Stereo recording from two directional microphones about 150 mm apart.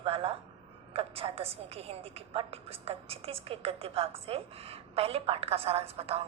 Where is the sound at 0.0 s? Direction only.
40° right (ahead or behind).